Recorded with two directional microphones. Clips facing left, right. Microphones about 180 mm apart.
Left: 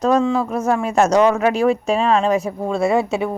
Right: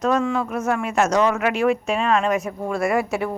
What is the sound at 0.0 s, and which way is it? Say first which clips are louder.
A man's voice: left 4 dB; 30° left (ahead or behind).